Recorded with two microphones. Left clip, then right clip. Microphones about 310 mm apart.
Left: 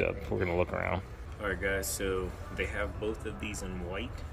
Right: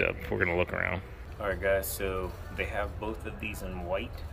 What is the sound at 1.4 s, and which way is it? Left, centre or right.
Speech, centre.